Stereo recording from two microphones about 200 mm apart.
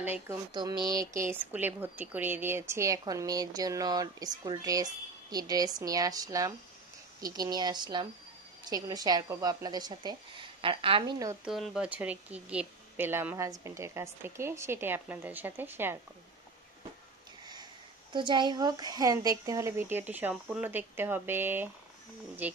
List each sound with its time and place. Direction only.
0.0 s speech: 10° right (ahead or behind)
0.5 s speech: 20° right (ahead or behind)
11.4 s speech: centre (ahead or behind)
18.1 s speech: 25° right (ahead or behind)